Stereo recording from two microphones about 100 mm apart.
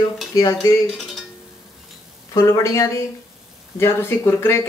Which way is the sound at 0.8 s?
Centre (ahead or behind).